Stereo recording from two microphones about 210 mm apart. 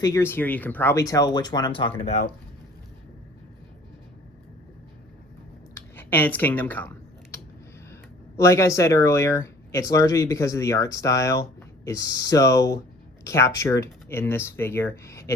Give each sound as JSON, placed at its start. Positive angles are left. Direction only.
{"t": 0.0, "sound": "speech", "side_deg": 10}
{"t": 5.7, "sound": "computer keyboard", "side_deg": 10}
{"t": 8.4, "sound": "speech", "side_deg": 15}